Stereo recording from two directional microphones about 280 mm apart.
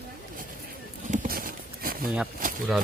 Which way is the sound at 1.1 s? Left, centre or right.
Right.